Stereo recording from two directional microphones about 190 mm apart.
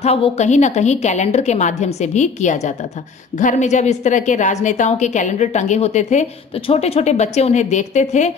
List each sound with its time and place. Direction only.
0.0 s a woman's voice: 35° left (ahead or behind)